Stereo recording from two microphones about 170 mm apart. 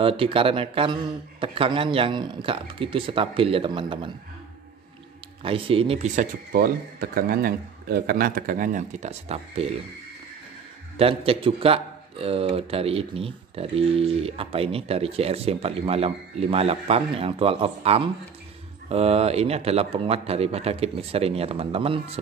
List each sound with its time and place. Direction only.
0.0 s a man's voice: 30° right (ahead or behind)
5.4 s a man's voice: 35° right (ahead or behind)
6.5 s speech: 60° right (ahead or behind); by 9.8 s 35° right (ahead or behind)
11.0 s a man's voice: 35° right (ahead or behind)